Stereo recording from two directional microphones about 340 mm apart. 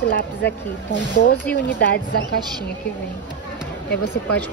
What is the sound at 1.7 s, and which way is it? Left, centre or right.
Speech, left.